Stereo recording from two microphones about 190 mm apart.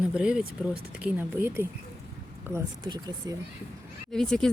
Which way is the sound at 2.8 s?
25° right (ahead or behind).